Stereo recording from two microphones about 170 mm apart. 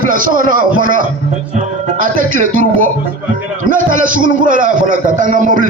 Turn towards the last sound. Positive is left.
turn(degrees=-50)  # may be behind; listen again after turning